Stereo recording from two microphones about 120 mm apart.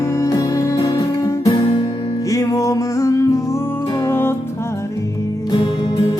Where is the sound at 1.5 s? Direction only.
50° left (ahead or behind).